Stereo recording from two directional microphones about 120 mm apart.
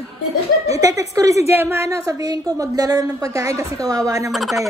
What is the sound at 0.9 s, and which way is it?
A woman's voice, 30° right (ahead or behind).